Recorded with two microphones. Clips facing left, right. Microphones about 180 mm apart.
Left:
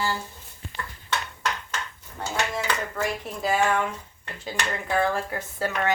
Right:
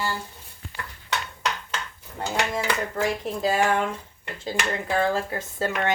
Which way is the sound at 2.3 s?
15° right (ahead or behind).